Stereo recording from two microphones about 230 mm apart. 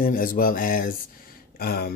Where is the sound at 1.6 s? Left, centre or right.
Left.